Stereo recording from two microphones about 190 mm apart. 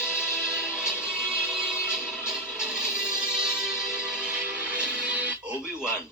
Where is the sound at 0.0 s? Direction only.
5° right (ahead or behind).